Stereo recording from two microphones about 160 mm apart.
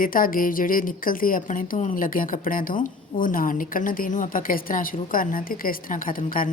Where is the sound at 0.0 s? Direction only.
60° left (ahead or behind).